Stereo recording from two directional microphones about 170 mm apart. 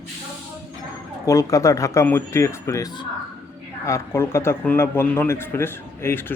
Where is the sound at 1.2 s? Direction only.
20° left (ahead or behind).